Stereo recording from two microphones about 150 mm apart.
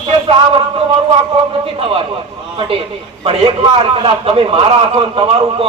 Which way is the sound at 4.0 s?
40° right (ahead or behind).